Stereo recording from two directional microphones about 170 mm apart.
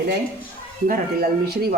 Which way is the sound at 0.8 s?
60° right (ahead or behind).